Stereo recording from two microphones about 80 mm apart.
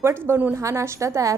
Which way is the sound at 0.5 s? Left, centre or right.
Right.